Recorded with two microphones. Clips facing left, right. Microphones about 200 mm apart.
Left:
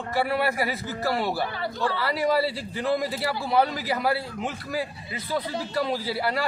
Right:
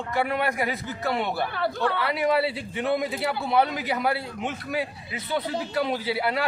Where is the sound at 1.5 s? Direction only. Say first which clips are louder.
Right 2 dB; 60° right (ahead or behind).